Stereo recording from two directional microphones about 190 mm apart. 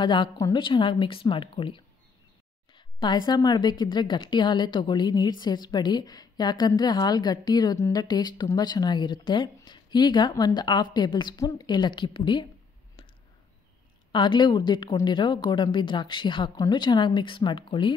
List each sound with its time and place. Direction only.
0.0 s a woman's voice: 25° left (ahead or behind)
14.1 s a woman's voice: 25° left (ahead or behind)